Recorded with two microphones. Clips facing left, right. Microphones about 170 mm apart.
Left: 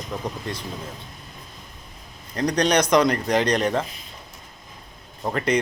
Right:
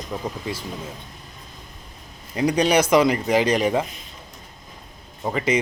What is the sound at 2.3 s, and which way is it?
Speech, 5° right (ahead or behind).